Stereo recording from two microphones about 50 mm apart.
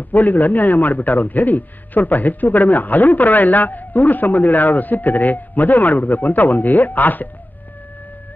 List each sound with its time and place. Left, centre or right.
0.1 s a man's voice: left